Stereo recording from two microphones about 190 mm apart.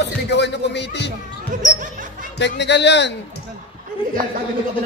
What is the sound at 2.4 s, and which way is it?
Speech, 65° left (ahead or behind).